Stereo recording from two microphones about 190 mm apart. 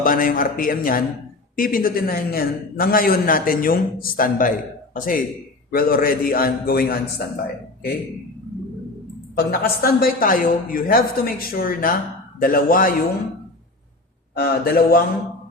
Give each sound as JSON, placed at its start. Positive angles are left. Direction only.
{"t": 0.0, "sound": "a man's voice", "side_deg": 45}
{"t": 9.3, "sound": "a man's voice", "side_deg": 55}
{"t": 14.3, "sound": "a man's voice", "side_deg": 55}